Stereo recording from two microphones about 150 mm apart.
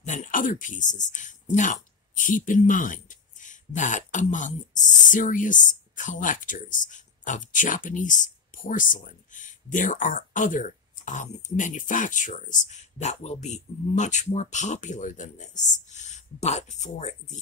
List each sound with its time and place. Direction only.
0.0 s speech: 55° left (ahead or behind)